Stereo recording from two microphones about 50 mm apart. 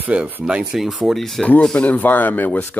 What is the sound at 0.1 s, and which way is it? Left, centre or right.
Speech, right.